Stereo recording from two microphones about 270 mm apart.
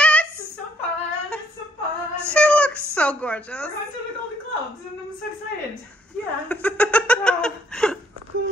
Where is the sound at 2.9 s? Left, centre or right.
Centre.